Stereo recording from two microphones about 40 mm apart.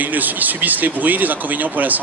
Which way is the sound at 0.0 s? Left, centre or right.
Right.